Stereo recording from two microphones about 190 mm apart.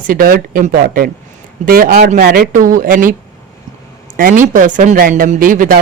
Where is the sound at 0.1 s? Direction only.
50° right (ahead or behind).